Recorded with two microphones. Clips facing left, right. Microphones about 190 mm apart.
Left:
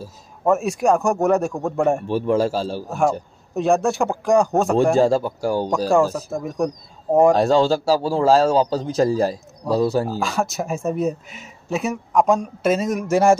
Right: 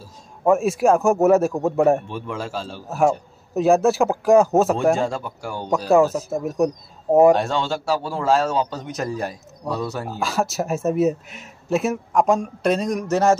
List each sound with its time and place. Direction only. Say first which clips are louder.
0.5 s speech: right 1 dB; centre (ahead or behind)
2.0 s a man's voice: left 10 dB; 35° left (ahead or behind)
3.5 s speech: right 2 dB; 5° right (ahead or behind)
4.9 s a man's voice: left 7 dB; 35° left (ahead or behind)
5.9 s speech: right 4 dB; 5° right (ahead or behind)
7.3 s a man's voice: left 7 dB; 35° left (ahead or behind)
10.1 s speech: even; centre (ahead or behind)